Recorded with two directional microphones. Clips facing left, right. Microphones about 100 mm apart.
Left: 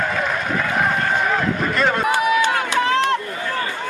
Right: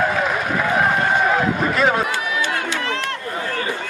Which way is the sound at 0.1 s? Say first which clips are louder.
Right 1 dB; 5° right (ahead or behind).